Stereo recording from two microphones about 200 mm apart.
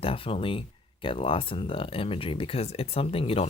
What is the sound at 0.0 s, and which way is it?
Speech, 30° left (ahead or behind).